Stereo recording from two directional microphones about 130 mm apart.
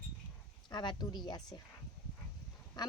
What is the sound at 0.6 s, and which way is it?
Speech, 35° left (ahead or behind).